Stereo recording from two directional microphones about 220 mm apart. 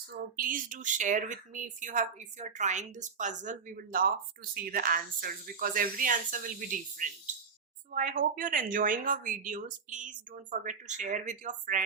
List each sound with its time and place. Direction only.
0.3 s speech: 40° right (ahead or behind)